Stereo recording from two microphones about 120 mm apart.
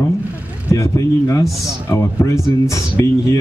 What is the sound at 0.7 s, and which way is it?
Speech, 25° left (ahead or behind).